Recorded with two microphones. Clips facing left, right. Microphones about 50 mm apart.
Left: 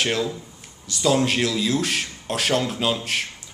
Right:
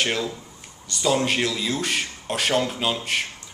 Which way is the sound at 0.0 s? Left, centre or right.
Centre.